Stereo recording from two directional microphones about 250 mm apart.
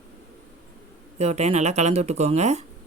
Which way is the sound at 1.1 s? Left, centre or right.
Right.